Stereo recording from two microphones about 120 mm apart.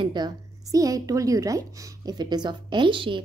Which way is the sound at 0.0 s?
35° right (ahead or behind).